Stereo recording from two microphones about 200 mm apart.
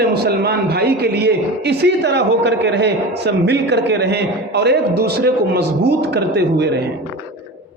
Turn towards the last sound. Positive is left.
turn(degrees=-55)  # may be behind; listen again after turning